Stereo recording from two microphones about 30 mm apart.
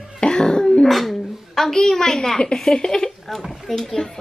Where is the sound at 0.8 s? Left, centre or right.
Centre; by 3.1 s left.